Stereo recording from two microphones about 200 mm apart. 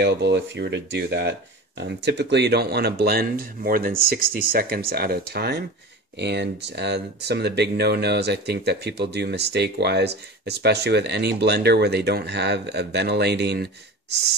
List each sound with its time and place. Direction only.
0.0 s speech: 60° right (ahead or behind)